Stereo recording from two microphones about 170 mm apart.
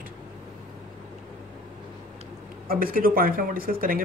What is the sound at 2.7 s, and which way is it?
Speech, 60° right (ahead or behind).